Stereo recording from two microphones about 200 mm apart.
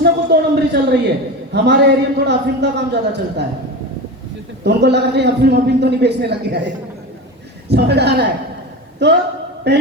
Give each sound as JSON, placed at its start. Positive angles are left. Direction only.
{"t": 0.0, "sound": "a sound", "side_deg": -55}
{"t": 1.5, "sound": "a man's voice", "side_deg": -60}
{"t": 4.6, "sound": "a man's voice", "side_deg": -55}
{"t": 7.7, "sound": "a man's voice", "side_deg": -55}